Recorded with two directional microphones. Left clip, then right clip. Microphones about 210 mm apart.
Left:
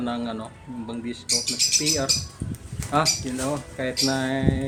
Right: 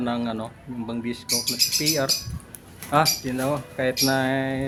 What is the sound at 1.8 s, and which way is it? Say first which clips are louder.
Speech: even; 20° right (ahead or behind).